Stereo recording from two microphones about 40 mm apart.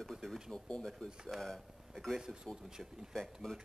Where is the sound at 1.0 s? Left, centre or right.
Centre.